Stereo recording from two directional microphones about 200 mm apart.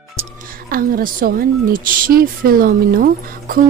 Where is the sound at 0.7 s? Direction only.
45° right (ahead or behind).